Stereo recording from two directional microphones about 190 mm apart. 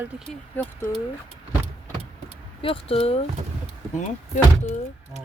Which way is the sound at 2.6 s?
30° left (ahead or behind).